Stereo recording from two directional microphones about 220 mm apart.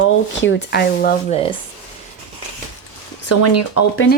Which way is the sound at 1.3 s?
25° left (ahead or behind).